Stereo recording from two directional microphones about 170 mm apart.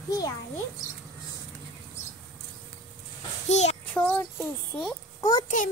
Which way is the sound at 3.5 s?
40° left (ahead or behind).